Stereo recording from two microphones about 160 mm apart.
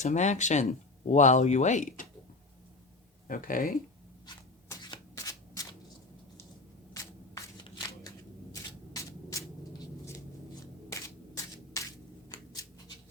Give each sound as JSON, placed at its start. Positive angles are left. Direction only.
{"t": 0.0, "sound": "speech", "side_deg": 50}
{"t": 3.2, "sound": "speech", "side_deg": 60}
{"t": 4.8, "sound": "shuffling cards", "side_deg": 25}
{"t": 6.9, "sound": "shuffling cards", "side_deg": 20}
{"t": 8.9, "sound": "hum", "side_deg": 20}
{"t": 10.8, "sound": "a sound", "side_deg": 20}